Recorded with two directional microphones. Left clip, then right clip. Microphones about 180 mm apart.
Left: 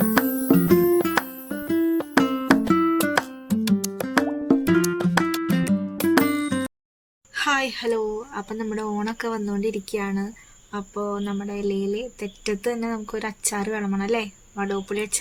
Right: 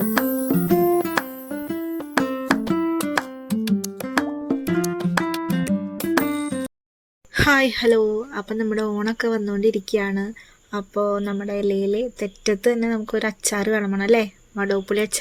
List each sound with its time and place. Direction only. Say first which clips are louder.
0.0 s music: even; centre (ahead or behind)
7.3 s speech: right 5 dB; 25° right (ahead or behind)